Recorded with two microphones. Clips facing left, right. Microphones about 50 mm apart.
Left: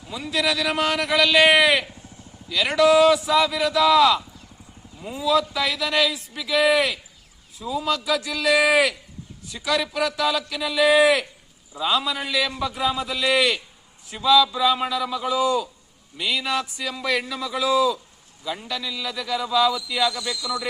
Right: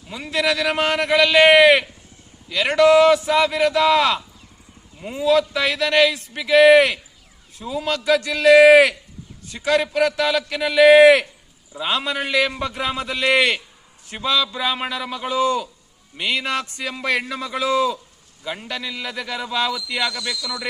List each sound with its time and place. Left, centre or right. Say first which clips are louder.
0.1 s a man's voice: right 2 dB; right